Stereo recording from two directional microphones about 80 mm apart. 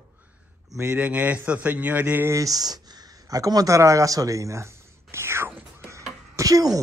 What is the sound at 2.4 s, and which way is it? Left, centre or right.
Speech, right.